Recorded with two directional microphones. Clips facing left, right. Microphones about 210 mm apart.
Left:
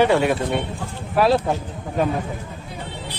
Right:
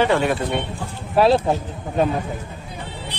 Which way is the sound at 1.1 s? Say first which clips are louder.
Right 2 dB; 25° right (ahead or behind).